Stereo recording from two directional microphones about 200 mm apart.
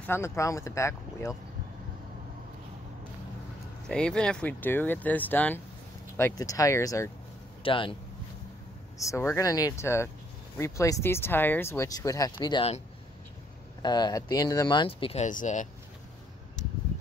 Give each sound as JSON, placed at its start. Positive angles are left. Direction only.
{"t": 0.0, "sound": "speech", "side_deg": 10}
{"t": 3.9, "sound": "speech", "side_deg": 5}
{"t": 7.6, "sound": "speech", "side_deg": 25}
{"t": 8.9, "sound": "speech", "side_deg": 15}
{"t": 13.8, "sound": "speech", "side_deg": 20}